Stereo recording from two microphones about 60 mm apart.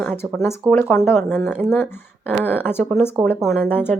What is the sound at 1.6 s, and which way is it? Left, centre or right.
A woman's voice, left.